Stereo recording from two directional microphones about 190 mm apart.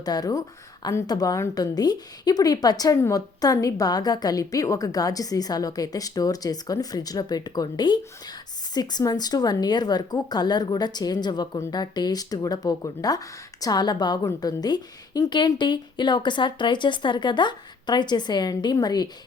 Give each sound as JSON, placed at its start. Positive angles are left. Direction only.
{"t": 0.0, "sound": "a woman's voice", "side_deg": 20}